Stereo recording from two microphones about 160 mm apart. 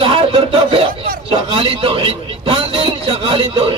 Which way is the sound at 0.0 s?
35° right (ahead or behind).